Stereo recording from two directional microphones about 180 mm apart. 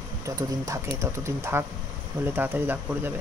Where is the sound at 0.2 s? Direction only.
15° right (ahead or behind).